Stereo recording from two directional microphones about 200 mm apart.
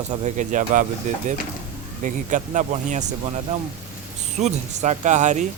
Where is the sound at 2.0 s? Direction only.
40° right (ahead or behind).